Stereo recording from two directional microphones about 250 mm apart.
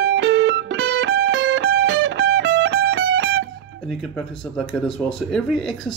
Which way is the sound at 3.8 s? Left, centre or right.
Centre.